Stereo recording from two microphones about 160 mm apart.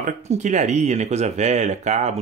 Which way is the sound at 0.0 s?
50° right (ahead or behind).